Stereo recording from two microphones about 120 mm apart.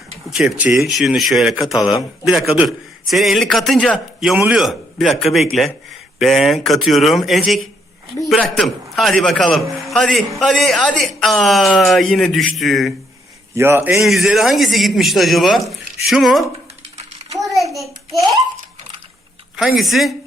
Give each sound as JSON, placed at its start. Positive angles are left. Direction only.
{"t": 0.3, "sound": "a man's voice", "side_deg": -5}
{"t": 1.7, "sound": "a man's voice", "side_deg": 30}
{"t": 2.6, "sound": "a man's voice", "side_deg": 0}
{"t": 4.4, "sound": "a man's voice", "side_deg": -10}
{"t": 13.6, "sound": "a man's voice", "side_deg": -20}
{"t": 13.9, "sound": "a man's voice", "side_deg": 0}
{"t": 17.3, "sound": "a sound", "side_deg": 0}
{"t": 19.5, "sound": "a man's voice", "side_deg": 0}